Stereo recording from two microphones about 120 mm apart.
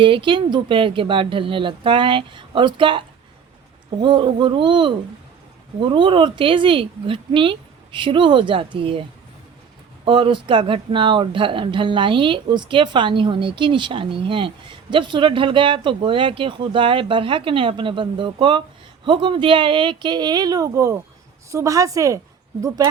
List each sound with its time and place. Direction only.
0.0 s speech: 45° right (ahead or behind)
4.0 s speech: 45° right (ahead or behind)
10.1 s a woman's voice: 45° right (ahead or behind); by 22.2 s 25° right (ahead or behind)